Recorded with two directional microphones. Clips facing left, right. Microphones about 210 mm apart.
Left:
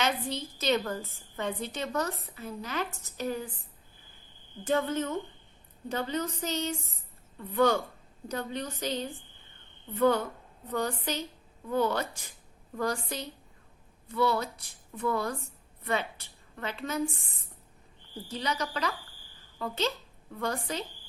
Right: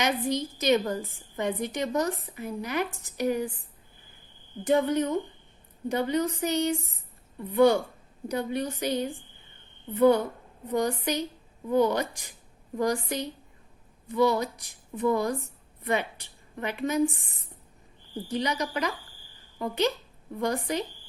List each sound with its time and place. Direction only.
0.0 s a woman's voice: 15° right (ahead or behind)
4.6 s a woman's voice: 15° right (ahead or behind)